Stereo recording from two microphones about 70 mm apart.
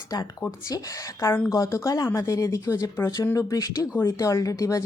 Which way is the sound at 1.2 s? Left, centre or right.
Left.